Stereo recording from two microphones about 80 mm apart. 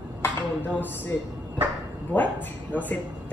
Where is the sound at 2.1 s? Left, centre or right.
Left.